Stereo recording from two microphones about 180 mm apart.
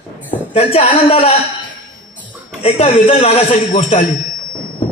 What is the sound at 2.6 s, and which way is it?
A woman's voice, 35° left (ahead or behind).